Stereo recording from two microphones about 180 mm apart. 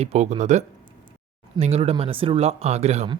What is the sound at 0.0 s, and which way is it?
Speech, 35° right (ahead or behind).